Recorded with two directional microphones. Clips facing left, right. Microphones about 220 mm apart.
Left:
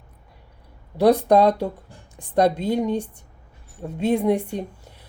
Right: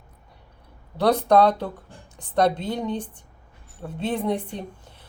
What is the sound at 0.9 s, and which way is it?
A woman's voice, 15° left (ahead or behind).